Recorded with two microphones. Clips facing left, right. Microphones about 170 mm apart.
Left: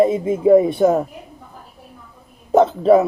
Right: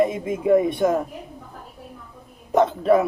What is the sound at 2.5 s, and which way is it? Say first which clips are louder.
Speech: left 5 dB; 30° left (ahead or behind).